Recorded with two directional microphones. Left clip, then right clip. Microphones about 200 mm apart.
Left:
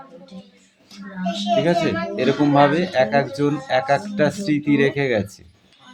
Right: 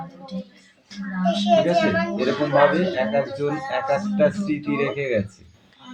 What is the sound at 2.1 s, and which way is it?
Speech, 50° left (ahead or behind).